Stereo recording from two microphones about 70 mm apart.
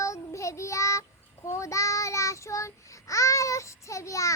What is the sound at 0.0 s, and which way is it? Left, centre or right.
Child singing, left.